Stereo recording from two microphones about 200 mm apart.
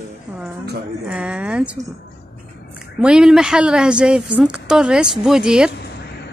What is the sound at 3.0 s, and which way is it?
A woman's voice, 5° right (ahead or behind).